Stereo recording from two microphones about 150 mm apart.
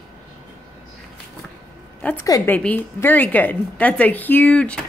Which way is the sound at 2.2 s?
20° left (ahead or behind).